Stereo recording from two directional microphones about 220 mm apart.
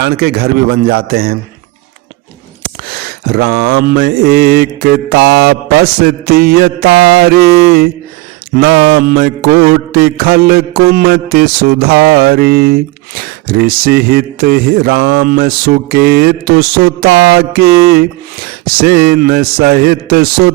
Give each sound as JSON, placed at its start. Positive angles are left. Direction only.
{"t": 0.0, "sound": "speech", "side_deg": -45}
{"t": 2.6, "sound": "a sound", "side_deg": -45}
{"t": 3.8, "sound": "speech", "side_deg": -45}